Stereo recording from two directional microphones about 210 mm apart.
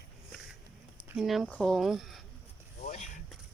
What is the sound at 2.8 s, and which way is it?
Vehicle, 35° left (ahead or behind).